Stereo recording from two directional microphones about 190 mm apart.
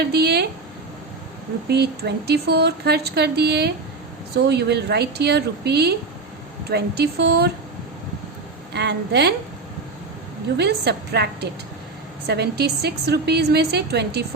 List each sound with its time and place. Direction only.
0.0 s speech: 60° right (ahead or behind)
1.6 s speech: 60° right (ahead or behind)
8.7 s speech: 60° right (ahead or behind)
10.6 s speech: 60° right (ahead or behind)